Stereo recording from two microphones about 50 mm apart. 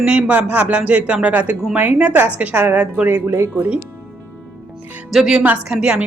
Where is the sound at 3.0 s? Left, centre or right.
Right.